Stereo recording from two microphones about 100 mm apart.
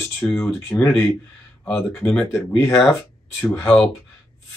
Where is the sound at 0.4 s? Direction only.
20° left (ahead or behind).